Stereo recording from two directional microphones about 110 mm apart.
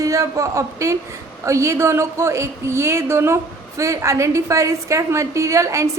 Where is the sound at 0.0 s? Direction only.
30° right (ahead or behind).